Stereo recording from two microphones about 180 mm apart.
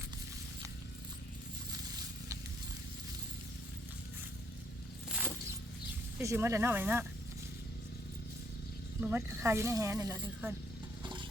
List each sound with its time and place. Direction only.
6.1 s speech: 15° right (ahead or behind)
9.0 s speech: 10° right (ahead or behind)